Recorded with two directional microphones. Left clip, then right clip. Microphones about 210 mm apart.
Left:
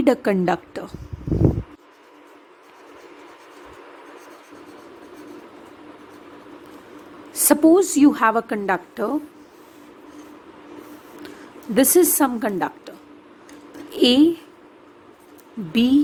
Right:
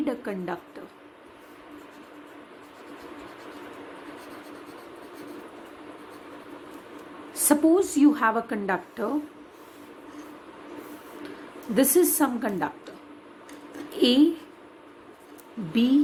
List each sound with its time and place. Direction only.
0.0 s a woman's voice: 50° left (ahead or behind)
7.3 s a woman's voice: 50° left (ahead or behind)
11.7 s a woman's voice: 50° left (ahead or behind)
13.9 s a sound: 50° left (ahead or behind)
15.7 s a woman's voice: 50° left (ahead or behind)